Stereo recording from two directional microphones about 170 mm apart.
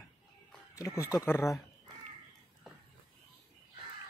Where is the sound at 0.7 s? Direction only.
20° left (ahead or behind).